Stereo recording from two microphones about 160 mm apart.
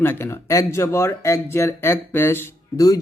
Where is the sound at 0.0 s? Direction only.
15° left (ahead or behind).